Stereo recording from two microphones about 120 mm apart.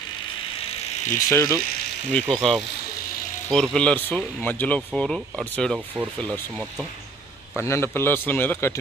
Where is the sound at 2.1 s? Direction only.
10° left (ahead or behind).